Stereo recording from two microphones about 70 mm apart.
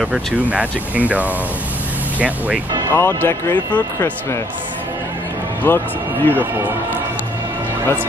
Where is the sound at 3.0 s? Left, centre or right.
Left.